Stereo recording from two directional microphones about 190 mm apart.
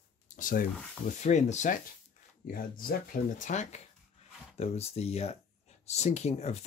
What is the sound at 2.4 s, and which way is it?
Speech, 50° left (ahead or behind).